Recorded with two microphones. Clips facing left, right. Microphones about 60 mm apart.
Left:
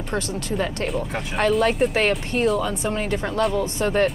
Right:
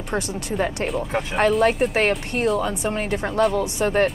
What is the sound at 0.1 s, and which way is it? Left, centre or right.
Speech, centre.